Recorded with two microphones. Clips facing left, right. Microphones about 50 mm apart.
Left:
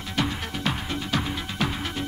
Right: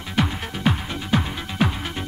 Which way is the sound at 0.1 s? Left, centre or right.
Centre.